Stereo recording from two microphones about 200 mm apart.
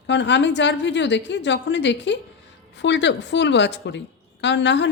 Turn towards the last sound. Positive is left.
turn(degrees=60)  # may be behind; listen again after turning